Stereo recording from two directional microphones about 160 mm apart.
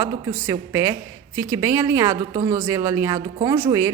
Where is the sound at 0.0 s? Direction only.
20° right (ahead or behind).